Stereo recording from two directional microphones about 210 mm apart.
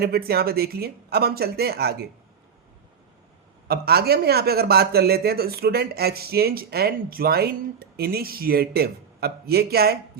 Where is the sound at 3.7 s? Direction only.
50° right (ahead or behind).